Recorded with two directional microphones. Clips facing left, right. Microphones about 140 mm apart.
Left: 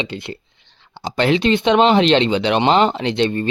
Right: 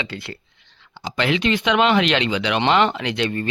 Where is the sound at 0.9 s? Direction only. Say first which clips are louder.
Left 5 dB; 35° left (ahead or behind).